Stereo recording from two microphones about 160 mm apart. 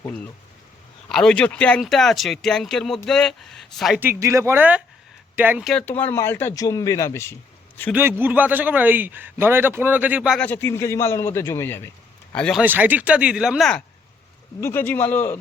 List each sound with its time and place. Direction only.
1.1 s speech: 5° left (ahead or behind)
4.0 s a man's voice: 15° right (ahead or behind)
5.6 s speech: 10° left (ahead or behind)
8.2 s a man's voice: 10° right (ahead or behind)
10.3 s speech: 10° left (ahead or behind)
12.3 s speech: 5° left (ahead or behind)
12.6 s a man's voice: 10° right (ahead or behind)
14.6 s speech: 15° left (ahead or behind)